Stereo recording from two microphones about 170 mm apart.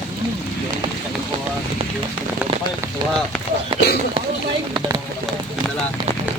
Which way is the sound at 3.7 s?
30° right (ahead or behind).